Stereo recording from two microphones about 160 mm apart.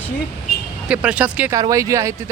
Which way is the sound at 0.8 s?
5° right (ahead or behind).